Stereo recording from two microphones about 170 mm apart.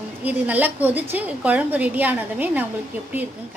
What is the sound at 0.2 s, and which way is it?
A woman's voice, 10° right (ahead or behind).